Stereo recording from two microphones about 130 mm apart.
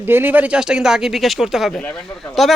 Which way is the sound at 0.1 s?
15° right (ahead or behind).